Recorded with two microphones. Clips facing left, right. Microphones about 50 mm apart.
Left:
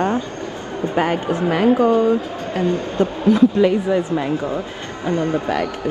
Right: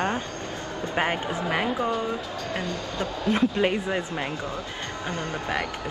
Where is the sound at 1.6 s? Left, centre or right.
Left.